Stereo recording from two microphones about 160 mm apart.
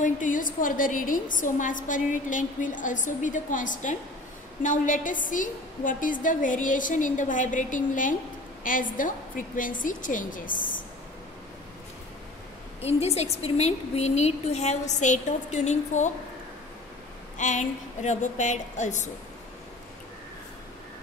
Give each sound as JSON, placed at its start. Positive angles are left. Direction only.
{"t": 0.0, "sound": "a woman's voice", "side_deg": 55}
{"t": 12.8, "sound": "a woman's voice", "side_deg": 40}
{"t": 17.4, "sound": "a woman's voice", "side_deg": 50}